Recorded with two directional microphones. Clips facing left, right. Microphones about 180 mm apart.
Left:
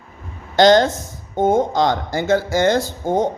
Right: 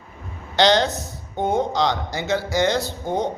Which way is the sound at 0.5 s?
45° left (ahead or behind).